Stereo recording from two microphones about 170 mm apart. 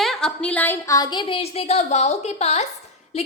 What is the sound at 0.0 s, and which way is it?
A woman's voice, 5° left (ahead or behind).